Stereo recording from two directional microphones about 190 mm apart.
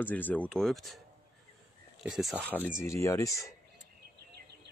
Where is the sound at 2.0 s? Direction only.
Centre (ahead or behind); by 3.5 s 15° left (ahead or behind).